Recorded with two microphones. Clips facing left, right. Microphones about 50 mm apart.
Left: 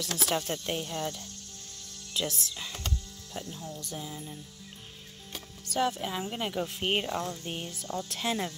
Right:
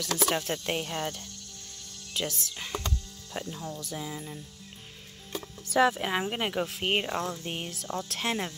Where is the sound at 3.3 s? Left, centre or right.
Right.